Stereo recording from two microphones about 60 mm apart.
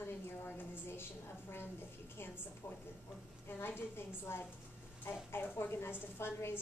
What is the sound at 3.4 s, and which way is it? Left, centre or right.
A woman's voice, left.